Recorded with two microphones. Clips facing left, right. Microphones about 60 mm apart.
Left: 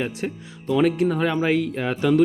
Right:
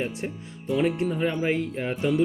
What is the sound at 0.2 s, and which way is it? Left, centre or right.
Speech, left.